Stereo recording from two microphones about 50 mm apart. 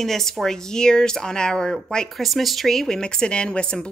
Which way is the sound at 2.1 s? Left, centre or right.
Centre.